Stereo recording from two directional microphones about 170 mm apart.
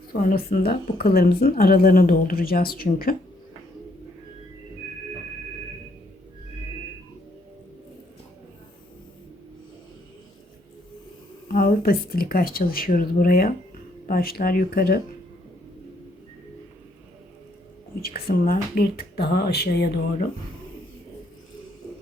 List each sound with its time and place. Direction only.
0.1 s speech: 60° left (ahead or behind)
11.4 s speech: 60° left (ahead or behind)
18.0 s speech: 60° left (ahead or behind)